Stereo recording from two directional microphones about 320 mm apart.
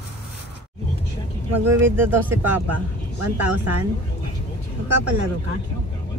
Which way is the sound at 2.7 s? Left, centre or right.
Right.